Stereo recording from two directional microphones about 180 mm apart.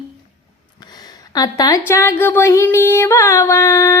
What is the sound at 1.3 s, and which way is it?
Speech, 20° left (ahead or behind).